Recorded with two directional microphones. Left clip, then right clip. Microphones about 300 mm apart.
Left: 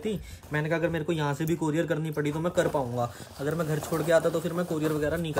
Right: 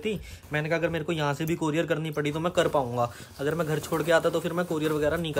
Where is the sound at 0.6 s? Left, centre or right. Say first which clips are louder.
Right 1 dB; centre.